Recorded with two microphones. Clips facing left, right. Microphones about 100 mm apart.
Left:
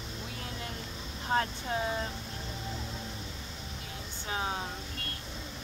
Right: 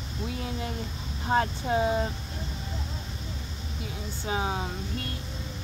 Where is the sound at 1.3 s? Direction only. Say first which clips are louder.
Right 5 dB; 20° right (ahead or behind).